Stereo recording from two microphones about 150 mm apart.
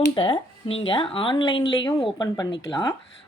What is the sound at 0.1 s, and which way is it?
A woman's voice, 35° left (ahead or behind).